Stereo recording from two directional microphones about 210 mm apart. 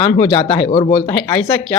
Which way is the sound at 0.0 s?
25° left (ahead or behind).